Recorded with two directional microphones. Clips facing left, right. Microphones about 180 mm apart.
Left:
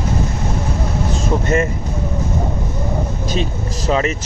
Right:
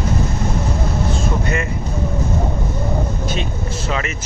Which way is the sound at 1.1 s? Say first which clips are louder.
Left 4 dB; 40° left (ahead or behind).